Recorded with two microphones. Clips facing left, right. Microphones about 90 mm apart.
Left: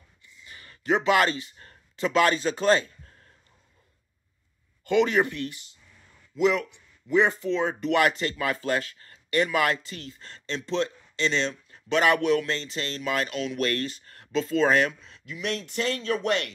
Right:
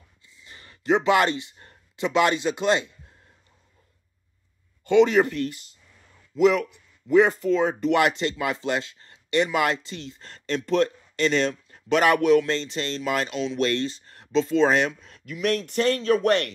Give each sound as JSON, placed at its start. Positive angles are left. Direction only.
{"t": 0.3, "sound": "a sound", "side_deg": -25}
{"t": 4.8, "sound": "speech", "side_deg": -25}
{"t": 10.6, "sound": "speech", "side_deg": -50}
{"t": 15.0, "sound": "speech", "side_deg": -45}